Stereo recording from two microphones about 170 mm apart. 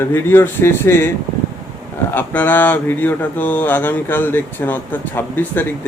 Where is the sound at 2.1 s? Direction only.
10° left (ahead or behind).